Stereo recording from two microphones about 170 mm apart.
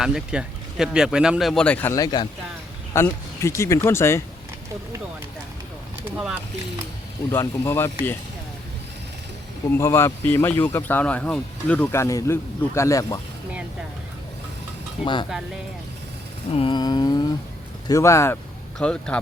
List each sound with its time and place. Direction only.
0.0 s speech: 5° right (ahead or behind); by 4.2 s 15° left (ahead or behind)
6.1 s speech: 10° right (ahead or behind)
7.3 s speech: 15° left (ahead or behind)
9.7 s speech: 15° left (ahead or behind)
15.0 s a sound: 30° left (ahead or behind)
16.5 s a sound: 35° left (ahead or behind)
17.8 s speech: 20° left (ahead or behind)
18.8 s speech: 5° left (ahead or behind)